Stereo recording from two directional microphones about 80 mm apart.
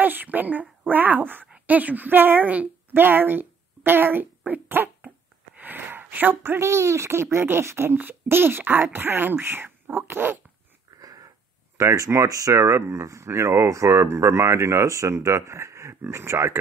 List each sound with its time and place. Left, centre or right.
0.0 s a woman's voice: right
11.0 s wheeze: right
11.7 s speech: right